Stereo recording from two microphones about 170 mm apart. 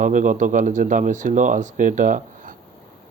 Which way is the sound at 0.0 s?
50° right (ahead or behind).